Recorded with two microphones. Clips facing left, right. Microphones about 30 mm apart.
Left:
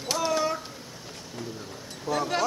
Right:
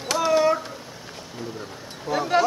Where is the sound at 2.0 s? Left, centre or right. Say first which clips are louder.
Right 5 dB; centre.